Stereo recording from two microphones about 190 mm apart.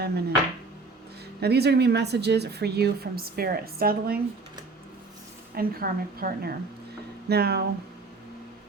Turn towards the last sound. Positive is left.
turn(degrees=-55)  # may be behind; listen again after turning